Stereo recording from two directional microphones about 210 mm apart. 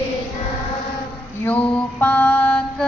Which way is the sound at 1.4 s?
5° left (ahead or behind).